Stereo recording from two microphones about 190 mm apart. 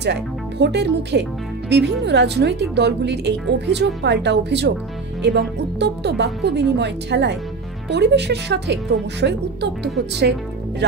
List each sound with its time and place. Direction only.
0.0 s a woman's voice: 60° right (ahead or behind)